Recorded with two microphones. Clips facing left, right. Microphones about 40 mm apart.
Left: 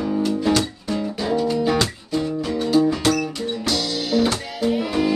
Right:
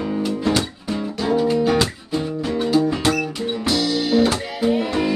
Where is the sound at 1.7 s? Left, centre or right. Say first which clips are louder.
Right 2 dB; centre.